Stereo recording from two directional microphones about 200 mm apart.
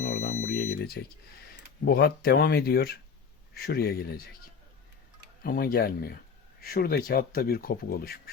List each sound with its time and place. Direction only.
0.0 s smoke detector: 40° left (ahead or behind)
0.4 s smoke detector: 50° left (ahead or behind)
1.8 s speech: 50° left (ahead or behind)
5.4 s speech: 50° left (ahead or behind)